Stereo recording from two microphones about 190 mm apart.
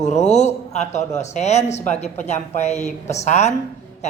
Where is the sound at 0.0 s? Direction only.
35° left (ahead or behind).